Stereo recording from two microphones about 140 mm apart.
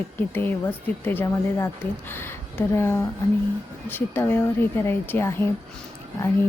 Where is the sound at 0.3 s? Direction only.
15° left (ahead or behind).